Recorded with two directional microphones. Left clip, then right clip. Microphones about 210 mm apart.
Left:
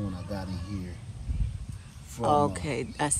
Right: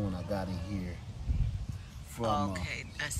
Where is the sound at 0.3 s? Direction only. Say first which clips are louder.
Right 3 dB; 15° right (ahead or behind).